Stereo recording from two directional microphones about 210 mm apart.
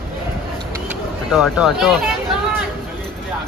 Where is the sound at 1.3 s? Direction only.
Centre (ahead or behind).